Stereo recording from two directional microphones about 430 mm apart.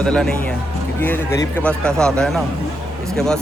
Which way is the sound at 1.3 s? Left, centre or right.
Centre.